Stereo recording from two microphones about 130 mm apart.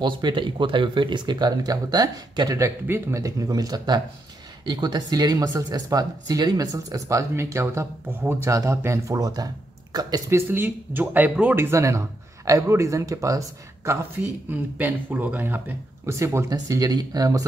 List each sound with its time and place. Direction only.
0.0 s speech: 35° right (ahead or behind)
10.3 s speech: 15° right (ahead or behind)